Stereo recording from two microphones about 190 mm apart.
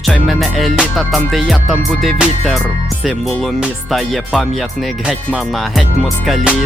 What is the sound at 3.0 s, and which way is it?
Music, centre (ahead or behind).